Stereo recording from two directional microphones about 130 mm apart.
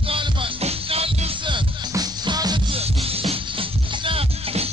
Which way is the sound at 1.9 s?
30° right (ahead or behind).